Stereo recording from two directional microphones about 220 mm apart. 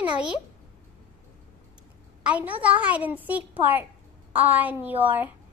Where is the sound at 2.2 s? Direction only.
5° right (ahead or behind).